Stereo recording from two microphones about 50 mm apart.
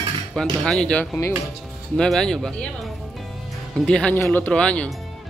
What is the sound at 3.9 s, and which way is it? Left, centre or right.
Speech, centre.